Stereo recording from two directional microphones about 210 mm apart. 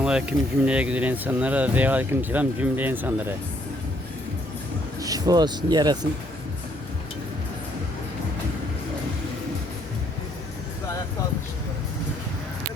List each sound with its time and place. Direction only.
0.0 s speech: 5° right (ahead or behind)
4.9 s speech: 15° right (ahead or behind)